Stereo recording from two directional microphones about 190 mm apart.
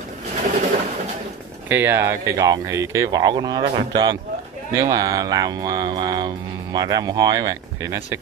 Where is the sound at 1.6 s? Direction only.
10° right (ahead or behind).